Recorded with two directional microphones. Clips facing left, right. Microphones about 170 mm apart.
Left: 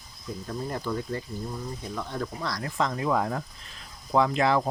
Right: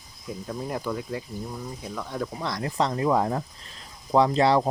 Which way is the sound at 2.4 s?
20° right (ahead or behind).